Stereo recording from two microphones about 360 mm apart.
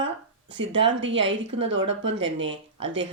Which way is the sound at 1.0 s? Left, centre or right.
Right.